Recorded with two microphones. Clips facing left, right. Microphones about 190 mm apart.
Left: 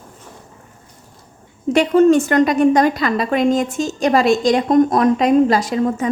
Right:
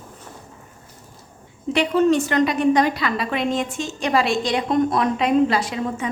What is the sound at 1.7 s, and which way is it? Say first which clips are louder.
A woman's voice: left 6 dB; 45° left (ahead or behind).